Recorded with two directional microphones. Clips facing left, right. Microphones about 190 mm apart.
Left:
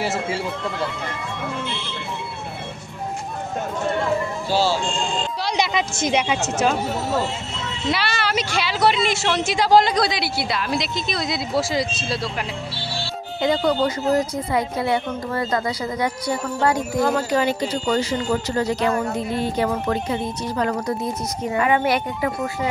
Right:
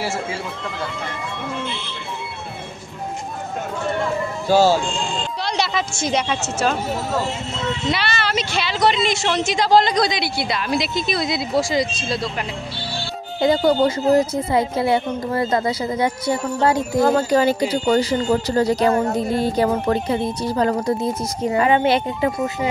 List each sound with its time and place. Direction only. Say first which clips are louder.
0.0 s speech: left 1 dB; 20° left (ahead or behind)
4.5 s speech: right 6 dB; 45° right (ahead or behind)
5.4 s a woman's voice: even; 15° left (ahead or behind)
7.9 s speech: left 3 dB; 10° left (ahead or behind)
13.4 s speech: right 4 dB; 30° right (ahead or behind)